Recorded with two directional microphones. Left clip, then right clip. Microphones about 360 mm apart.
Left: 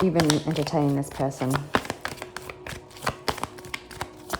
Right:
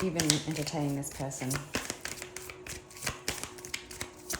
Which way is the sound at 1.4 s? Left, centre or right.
Centre.